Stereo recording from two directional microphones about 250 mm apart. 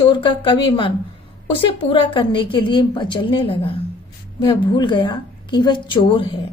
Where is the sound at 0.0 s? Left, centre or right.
Centre.